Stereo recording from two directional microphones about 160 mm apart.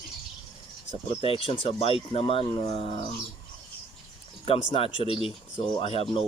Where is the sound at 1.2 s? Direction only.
35° left (ahead or behind).